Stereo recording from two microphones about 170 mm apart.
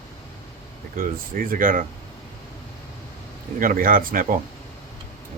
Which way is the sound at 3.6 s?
55° right (ahead or behind).